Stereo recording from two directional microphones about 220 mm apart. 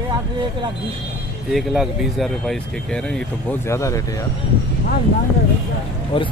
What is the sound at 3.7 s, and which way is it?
Speech, 15° left (ahead or behind).